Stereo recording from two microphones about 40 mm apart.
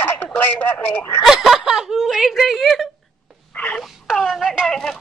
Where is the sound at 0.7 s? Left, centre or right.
Left.